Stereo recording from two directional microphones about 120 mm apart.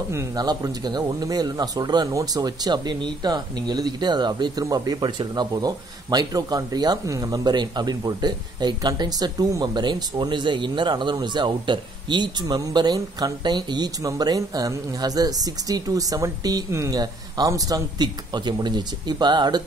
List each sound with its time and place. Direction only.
0.1 s a man's voice: 30° right (ahead or behind)